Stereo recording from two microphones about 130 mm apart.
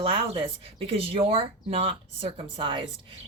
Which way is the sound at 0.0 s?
45° right (ahead or behind).